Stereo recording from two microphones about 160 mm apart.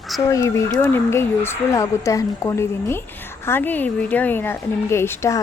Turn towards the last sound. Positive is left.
turn(degrees=15)  # may be behind; listen again after turning